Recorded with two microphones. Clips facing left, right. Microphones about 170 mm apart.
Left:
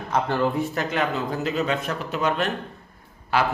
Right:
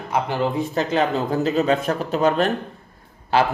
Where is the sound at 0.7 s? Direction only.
30° right (ahead or behind).